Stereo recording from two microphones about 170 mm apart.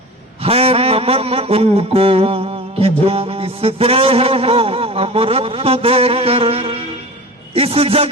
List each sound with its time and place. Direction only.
0.4 s mantra: 35° right (ahead or behind)
7.5 s a man's voice: 35° right (ahead or behind)